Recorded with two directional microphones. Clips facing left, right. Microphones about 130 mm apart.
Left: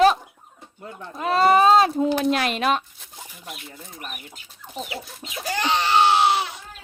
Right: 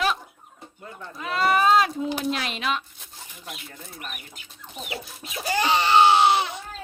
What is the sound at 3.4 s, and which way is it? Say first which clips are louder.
Speech: even; 5° left (ahead or behind).